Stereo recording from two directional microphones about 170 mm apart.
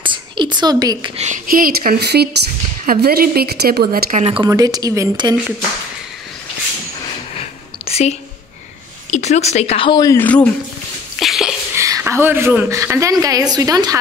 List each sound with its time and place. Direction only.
0.0 s a sound: 30° right (ahead or behind)
1.5 s speech: 60° right (ahead or behind)
4.2 s speech: 30° right (ahead or behind)
4.5 s speech: 20° right (ahead or behind)
7.3 s whispering: 35° left (ahead or behind)
9.1 s speech: 40° left (ahead or behind); by 10.1 s 25° left (ahead or behind)
10.1 s speech: 10° left (ahead or behind)
11.1 s a sound: centre (ahead or behind)
11.7 s a woman's voice: 15° right (ahead or behind)